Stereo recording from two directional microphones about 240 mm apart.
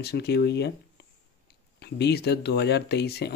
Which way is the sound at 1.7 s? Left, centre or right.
Left.